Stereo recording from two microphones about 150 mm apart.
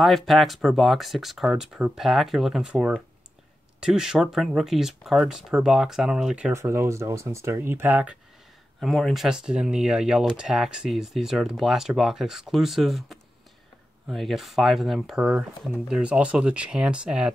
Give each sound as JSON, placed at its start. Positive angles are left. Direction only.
{"t": 0.0, "sound": "speech", "side_deg": 0}
{"t": 6.5, "sound": "speech", "side_deg": -20}